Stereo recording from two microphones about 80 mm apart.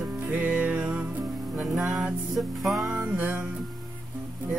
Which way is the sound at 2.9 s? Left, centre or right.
Centre.